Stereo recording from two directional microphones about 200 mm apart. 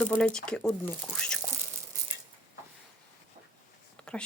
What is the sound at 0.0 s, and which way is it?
Speech, 5° left (ahead or behind).